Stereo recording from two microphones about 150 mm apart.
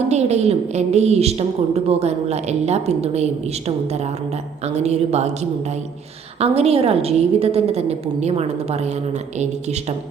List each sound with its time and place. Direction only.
0.1 s a woman's voice: 45° right (ahead or behind)
4.6 s a woman's voice: 45° right (ahead or behind)